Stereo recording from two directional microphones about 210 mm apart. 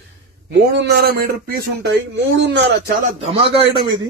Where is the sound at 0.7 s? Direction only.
55° right (ahead or behind).